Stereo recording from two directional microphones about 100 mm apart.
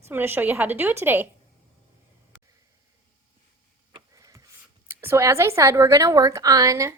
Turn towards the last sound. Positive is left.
turn(degrees=-35)  # may be behind; listen again after turning